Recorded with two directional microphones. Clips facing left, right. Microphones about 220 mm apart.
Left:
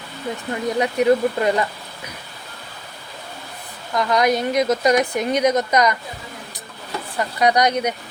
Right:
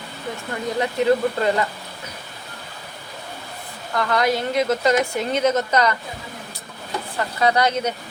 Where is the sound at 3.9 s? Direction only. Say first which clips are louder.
Left 2 dB; 15° left (ahead or behind).